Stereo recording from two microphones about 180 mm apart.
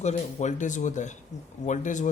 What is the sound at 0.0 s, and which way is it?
A man's voice, 40° left (ahead or behind).